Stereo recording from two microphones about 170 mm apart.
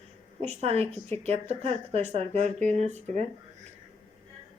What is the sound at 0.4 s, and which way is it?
Speech, 35° right (ahead or behind).